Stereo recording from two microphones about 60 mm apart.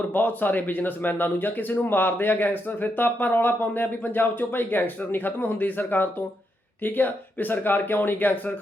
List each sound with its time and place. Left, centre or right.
0.1 s a man's voice: left